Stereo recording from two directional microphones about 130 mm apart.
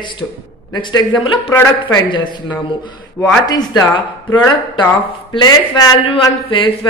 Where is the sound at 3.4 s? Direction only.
30° left (ahead or behind).